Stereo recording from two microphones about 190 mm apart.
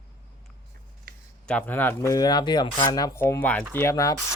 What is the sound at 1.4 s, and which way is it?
Speech, 5° left (ahead or behind).